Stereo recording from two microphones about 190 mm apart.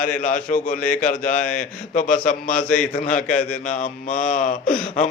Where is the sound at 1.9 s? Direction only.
45° left (ahead or behind).